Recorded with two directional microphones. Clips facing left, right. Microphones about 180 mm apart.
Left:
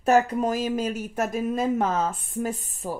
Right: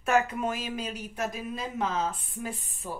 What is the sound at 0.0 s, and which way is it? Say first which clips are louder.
Speech: left 6 dB; 35° left (ahead or behind).